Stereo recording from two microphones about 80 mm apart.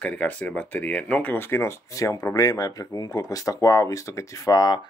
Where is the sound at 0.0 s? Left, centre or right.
Centre.